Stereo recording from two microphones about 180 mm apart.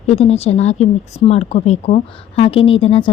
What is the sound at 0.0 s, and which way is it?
A woman's voice, 35° left (ahead or behind).